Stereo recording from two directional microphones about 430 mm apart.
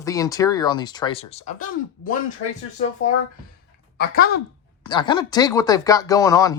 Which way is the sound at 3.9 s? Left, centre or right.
Left.